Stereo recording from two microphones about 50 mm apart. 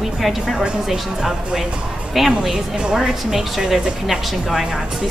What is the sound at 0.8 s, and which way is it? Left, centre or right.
Speech, centre.